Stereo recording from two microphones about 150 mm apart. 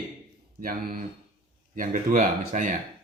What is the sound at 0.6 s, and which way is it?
Speech, 80° right.